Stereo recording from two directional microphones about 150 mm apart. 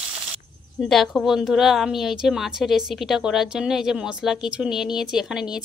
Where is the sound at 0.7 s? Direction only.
Centre (ahead or behind).